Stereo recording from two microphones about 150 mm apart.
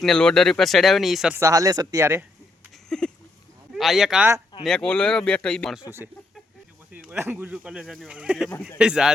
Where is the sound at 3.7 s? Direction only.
Centre (ahead or behind).